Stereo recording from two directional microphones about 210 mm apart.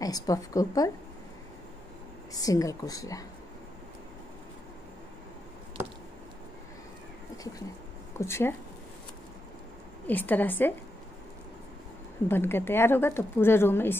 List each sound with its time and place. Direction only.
0.0 s a woman's voice: 15° left (ahead or behind)
2.3 s a woman's voice: 15° left (ahead or behind)
8.2 s a woman's voice: 10° left (ahead or behind)
10.0 s a woman's voice: 10° left (ahead or behind)
12.3 s a woman's voice: 10° left (ahead or behind)